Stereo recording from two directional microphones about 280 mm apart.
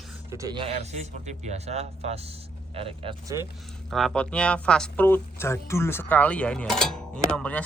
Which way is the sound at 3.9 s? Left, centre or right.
Centre.